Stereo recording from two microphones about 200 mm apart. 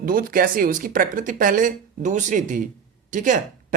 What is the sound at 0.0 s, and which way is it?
A man's voice, 45° right (ahead or behind).